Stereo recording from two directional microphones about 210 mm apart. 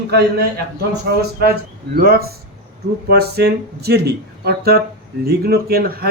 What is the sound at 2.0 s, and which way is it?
Speech, 45° right (ahead or behind).